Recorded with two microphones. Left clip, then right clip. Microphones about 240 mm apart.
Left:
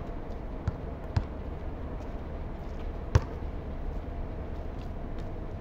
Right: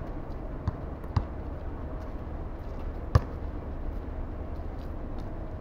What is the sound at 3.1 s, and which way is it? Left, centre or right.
Basketball bounce, centre.